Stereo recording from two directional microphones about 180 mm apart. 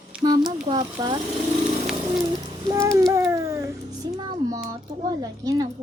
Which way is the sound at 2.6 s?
15° right (ahead or behind).